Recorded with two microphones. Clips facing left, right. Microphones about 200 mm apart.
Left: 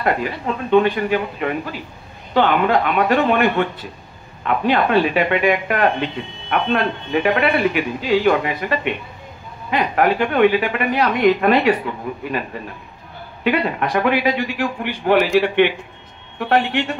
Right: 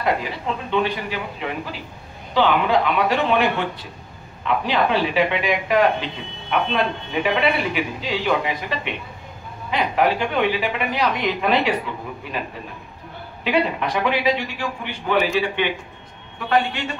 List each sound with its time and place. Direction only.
0.0 s a man's voice: 55° left (ahead or behind)
13.4 s a man's voice: 55° left (ahead or behind)